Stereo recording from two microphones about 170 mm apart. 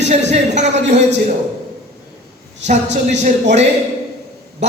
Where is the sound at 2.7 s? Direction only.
45° right (ahead or behind).